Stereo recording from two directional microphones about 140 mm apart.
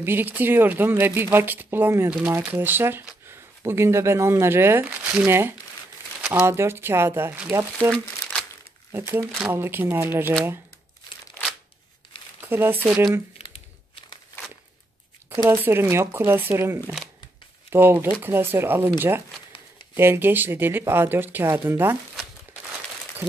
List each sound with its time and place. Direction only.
0.0 s speech: 15° right (ahead or behind)
7.9 s crumpling: 5° left (ahead or behind)
8.9 s speech: 15° right (ahead or behind)
12.4 s speech: 15° right (ahead or behind)
15.2 s speech: 15° right (ahead or behind)